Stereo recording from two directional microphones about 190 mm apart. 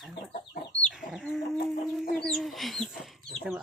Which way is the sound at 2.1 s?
5° left (ahead or behind).